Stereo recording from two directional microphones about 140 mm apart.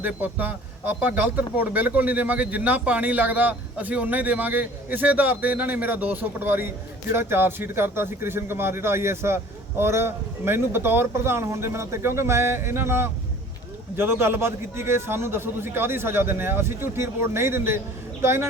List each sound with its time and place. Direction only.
0.0 s a man's voice: 10° right (ahead or behind)